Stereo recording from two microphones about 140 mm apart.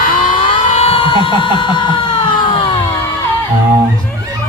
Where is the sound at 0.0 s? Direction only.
80° left.